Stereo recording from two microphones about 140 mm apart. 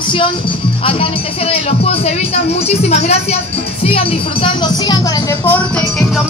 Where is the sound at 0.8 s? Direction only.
40° left (ahead or behind); by 5.6 s 20° left (ahead or behind).